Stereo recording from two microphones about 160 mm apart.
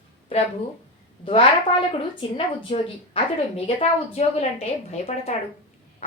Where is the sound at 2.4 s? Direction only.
35° left (ahead or behind).